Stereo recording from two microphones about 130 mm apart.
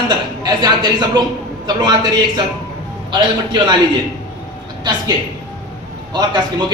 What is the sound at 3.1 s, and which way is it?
Speech, 35° right (ahead or behind).